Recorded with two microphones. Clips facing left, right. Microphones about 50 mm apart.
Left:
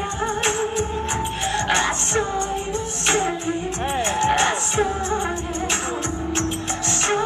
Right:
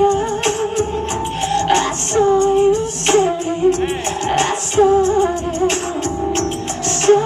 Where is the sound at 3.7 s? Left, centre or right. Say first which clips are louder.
Right 4 dB; left.